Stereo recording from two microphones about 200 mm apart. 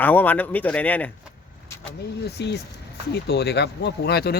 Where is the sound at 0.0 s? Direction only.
10° left (ahead or behind).